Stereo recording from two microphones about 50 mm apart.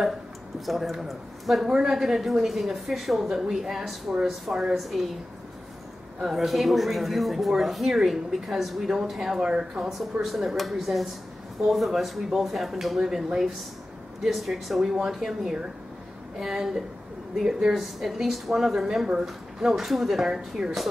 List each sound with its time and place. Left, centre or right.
0.7 s speech: centre
6.2 s speech: centre
10.2 s a woman's voice: centre